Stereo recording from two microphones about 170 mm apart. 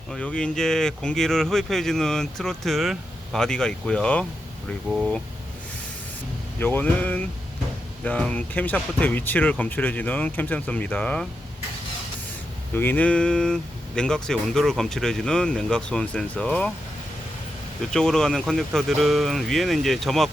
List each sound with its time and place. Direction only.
0.1 s speech: 5° left (ahead or behind)
6.6 s speech: 10° left (ahead or behind)
12.7 s speech: 10° left (ahead or behind)
17.9 s speech: 5° left (ahead or behind)